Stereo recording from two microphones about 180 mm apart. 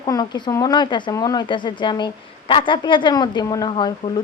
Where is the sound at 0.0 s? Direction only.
25° left (ahead or behind).